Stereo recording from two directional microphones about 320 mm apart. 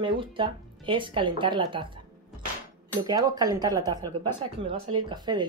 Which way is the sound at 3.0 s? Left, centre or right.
Centre.